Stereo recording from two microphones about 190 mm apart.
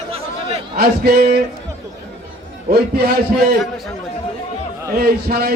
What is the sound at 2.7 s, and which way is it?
Speech, 55° right (ahead or behind).